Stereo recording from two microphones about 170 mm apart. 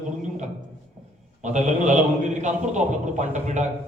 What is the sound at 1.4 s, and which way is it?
A man's voice, 45° right (ahead or behind).